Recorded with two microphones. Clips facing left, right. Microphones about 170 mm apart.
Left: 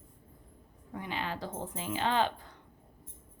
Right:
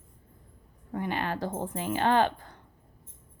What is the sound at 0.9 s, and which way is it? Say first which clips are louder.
A woman's voice: right 6 dB; 55° right (ahead or behind).